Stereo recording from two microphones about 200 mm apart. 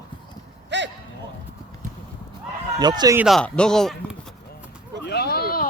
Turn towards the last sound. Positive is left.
turn(degrees=50)  # may be behind; listen again after turning